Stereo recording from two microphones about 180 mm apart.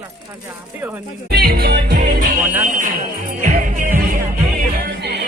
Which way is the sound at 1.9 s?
50° right (ahead or behind).